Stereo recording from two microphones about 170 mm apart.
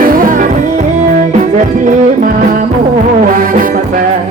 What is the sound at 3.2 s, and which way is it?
Music, 55° right (ahead or behind).